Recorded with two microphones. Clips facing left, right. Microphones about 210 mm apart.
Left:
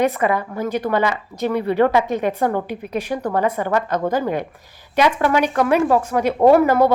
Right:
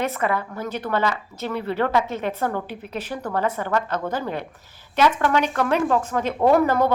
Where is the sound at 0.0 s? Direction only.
15° left (ahead or behind).